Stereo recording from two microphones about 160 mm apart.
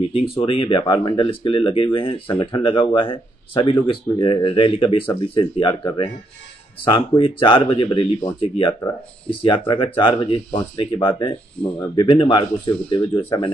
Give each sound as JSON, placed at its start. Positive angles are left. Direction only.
{"t": 0.1, "sound": "speech", "side_deg": 35}